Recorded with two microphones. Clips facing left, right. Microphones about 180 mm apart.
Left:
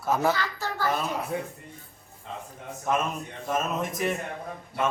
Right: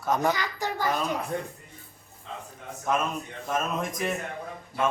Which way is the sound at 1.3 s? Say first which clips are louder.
Even; 5° left (ahead or behind).